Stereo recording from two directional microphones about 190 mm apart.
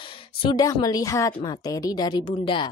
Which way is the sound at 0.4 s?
20° left (ahead or behind).